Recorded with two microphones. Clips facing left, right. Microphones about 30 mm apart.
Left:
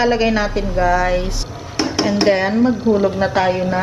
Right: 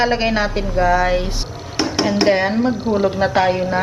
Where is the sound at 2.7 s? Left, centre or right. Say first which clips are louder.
Left 2 dB; right.